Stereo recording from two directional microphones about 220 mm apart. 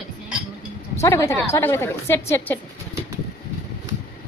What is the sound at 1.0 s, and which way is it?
A woman's voice, 15° left (ahead or behind).